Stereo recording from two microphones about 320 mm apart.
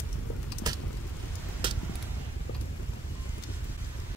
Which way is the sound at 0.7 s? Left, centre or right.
Centre.